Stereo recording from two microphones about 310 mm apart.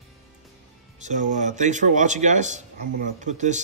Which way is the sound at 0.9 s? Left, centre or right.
Right.